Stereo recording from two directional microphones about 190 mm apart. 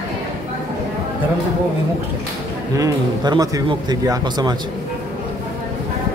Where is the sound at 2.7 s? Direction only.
20° right (ahead or behind).